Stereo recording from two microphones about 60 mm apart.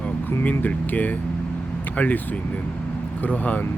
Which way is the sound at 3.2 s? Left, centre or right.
Left.